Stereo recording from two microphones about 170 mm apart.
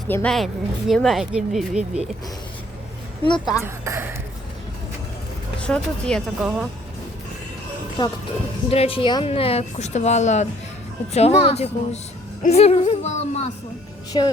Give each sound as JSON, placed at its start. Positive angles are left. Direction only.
{"t": 0.1, "sound": "speech", "side_deg": 5}
{"t": 3.6, "sound": "speech", "side_deg": -15}
{"t": 5.5, "sound": "speech", "side_deg": 5}
{"t": 8.0, "sound": "speech", "side_deg": 25}
{"t": 14.1, "sound": "speech", "side_deg": 30}